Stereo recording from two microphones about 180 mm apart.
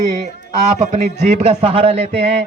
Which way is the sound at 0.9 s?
40° right (ahead or behind).